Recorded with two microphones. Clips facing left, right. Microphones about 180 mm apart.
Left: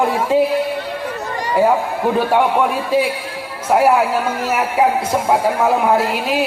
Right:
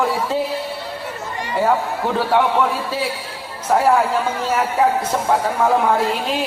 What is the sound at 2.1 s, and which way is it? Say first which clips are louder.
Speech: left 1 dB; 15° left (ahead or behind).